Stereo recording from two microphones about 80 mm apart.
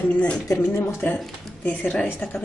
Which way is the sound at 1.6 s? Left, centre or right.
Left.